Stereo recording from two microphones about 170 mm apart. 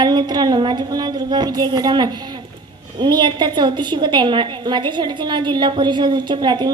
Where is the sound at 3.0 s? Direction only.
25° right (ahead or behind).